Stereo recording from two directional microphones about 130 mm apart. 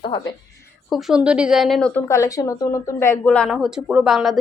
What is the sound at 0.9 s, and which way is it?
Speech, 5° right (ahead or behind).